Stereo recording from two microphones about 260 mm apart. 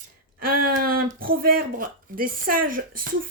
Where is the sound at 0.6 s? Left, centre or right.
Right.